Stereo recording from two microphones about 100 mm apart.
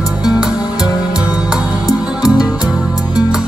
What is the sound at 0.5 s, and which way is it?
Music, 40° left (ahead or behind).